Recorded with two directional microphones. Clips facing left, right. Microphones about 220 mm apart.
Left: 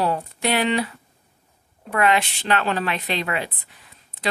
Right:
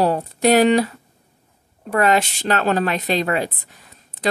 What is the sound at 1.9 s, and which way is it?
A woman's voice, 40° right (ahead or behind).